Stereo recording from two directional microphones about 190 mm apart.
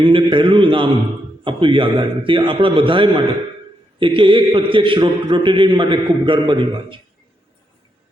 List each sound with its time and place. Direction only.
0.0 s a man's voice: 25° right (ahead or behind)